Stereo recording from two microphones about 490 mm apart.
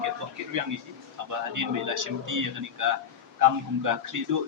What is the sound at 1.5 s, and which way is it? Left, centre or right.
Speech, right.